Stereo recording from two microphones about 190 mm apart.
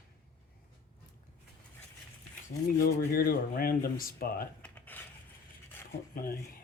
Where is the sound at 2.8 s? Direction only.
50° left (ahead or behind).